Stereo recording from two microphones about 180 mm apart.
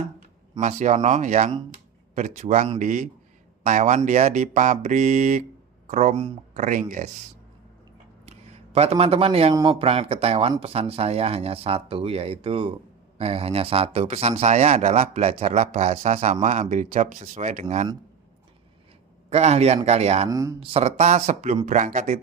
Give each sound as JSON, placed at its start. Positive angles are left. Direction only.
{"t": 0.6, "sound": "speech", "side_deg": -40}
{"t": 8.3, "sound": "a sound", "side_deg": -35}
{"t": 9.5, "sound": "speech", "side_deg": -25}
{"t": 19.3, "sound": "speech", "side_deg": -35}
{"t": 20.2, "sound": "speech", "side_deg": -20}
{"t": 20.6, "sound": "speech", "side_deg": -35}